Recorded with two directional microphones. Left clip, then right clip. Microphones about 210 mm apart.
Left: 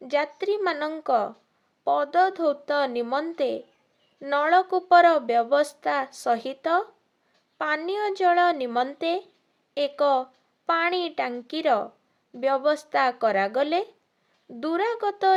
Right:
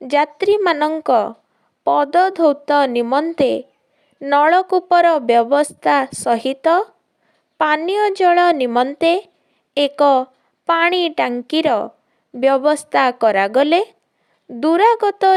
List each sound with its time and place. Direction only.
0.0 s a woman's voice: 40° right (ahead or behind)